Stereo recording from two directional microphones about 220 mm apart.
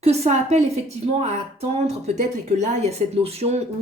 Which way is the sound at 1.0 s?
30° right (ahead or behind).